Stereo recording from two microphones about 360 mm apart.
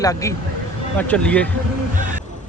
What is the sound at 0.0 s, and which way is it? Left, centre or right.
Speech, centre.